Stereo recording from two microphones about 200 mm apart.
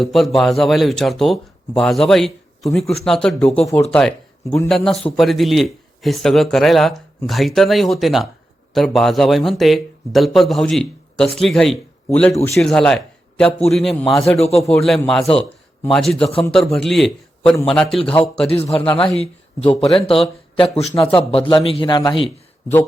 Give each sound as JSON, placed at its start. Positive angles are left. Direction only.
{"t": 0.0, "sound": "speech", "side_deg": 0}
{"t": 14.3, "sound": "a man's voice", "side_deg": 30}
{"t": 14.6, "sound": "a man's voice", "side_deg": 0}
{"t": 18.4, "sound": "a man's voice", "side_deg": 30}